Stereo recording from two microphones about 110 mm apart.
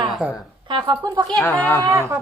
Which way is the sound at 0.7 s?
40° right (ahead or behind).